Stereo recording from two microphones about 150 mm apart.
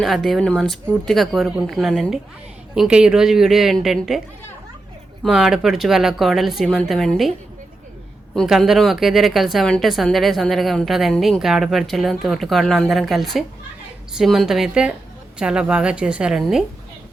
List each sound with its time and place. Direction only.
0.0 s a woman's voice: centre (ahead or behind)
5.2 s a woman's voice: centre (ahead or behind)
8.4 s a woman's voice: centre (ahead or behind)